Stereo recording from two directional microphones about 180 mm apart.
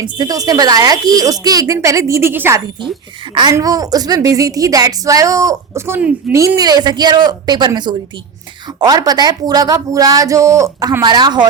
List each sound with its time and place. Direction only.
0.0 s a woman's voice: 20° right (ahead or behind)
6.4 s a woman's voice: 20° right (ahead or behind)